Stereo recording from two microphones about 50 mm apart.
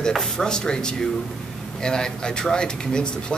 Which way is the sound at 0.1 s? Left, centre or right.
Centre.